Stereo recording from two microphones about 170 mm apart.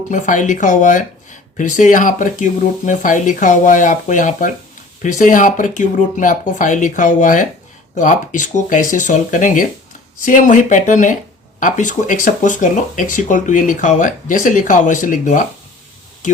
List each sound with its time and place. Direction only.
0.1 s speech: 45° left (ahead or behind)